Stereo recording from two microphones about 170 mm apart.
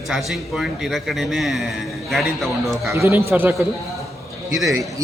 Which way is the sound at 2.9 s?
15° right (ahead or behind).